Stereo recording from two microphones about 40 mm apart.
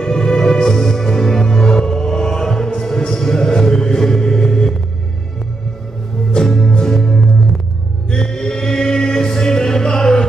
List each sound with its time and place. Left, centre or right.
0.0 s music: centre
6.3 s music: centre
8.1 s chant: centre